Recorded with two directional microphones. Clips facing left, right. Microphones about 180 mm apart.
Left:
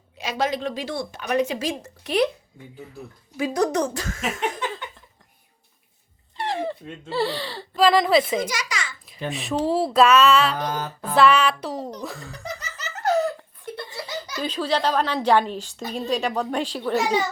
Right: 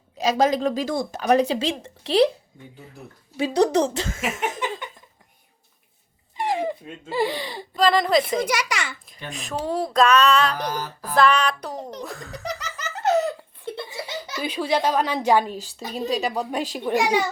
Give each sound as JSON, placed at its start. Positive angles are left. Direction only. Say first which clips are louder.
{"t": 0.2, "sound": "speech", "louder": "right 6 dB", "side_deg": -40}
{"t": 3.3, "sound": "speech", "louder": "right 3 dB", "side_deg": -30}
{"t": 4.2, "sound": "a sound", "louder": "left 1 dB", "side_deg": -10}
{"t": 6.3, "sound": "speech", "louder": "right 2 dB", "side_deg": -15}
{"t": 7.8, "sound": "music", "louder": "left 1 dB", "side_deg": 5}
{"t": 8.4, "sound": "a child's voice", "louder": "right 5 dB", "side_deg": -65}
{"t": 9.3, "sound": "music", "louder": "left 4 dB", "side_deg": 0}
{"t": 12.4, "sound": "laughter", "louder": "right 5 dB", "side_deg": -90}
{"t": 13.0, "sound": "a sound", "louder": "right 1 dB", "side_deg": -20}
{"t": 13.9, "sound": "laughter", "louder": "even", "side_deg": -10}
{"t": 14.3, "sound": "a child's voice", "louder": "right 1 dB", "side_deg": -10}